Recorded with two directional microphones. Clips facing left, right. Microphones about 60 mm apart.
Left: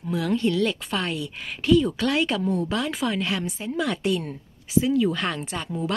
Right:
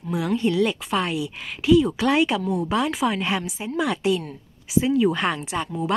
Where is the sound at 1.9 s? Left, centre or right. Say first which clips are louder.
Right 3 dB; right.